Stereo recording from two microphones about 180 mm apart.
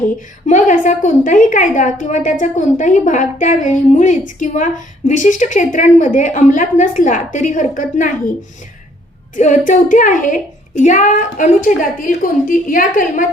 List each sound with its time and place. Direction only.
0.4 s a woman's voice: 45° left (ahead or behind)